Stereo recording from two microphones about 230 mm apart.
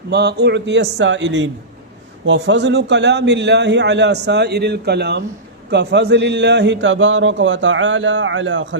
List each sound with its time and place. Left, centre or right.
0.1 s a man's voice: right